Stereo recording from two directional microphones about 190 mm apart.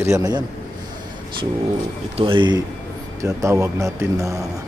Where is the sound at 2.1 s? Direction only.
25° right (ahead or behind).